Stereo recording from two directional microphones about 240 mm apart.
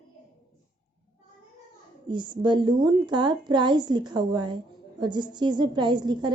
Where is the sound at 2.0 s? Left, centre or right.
Centre.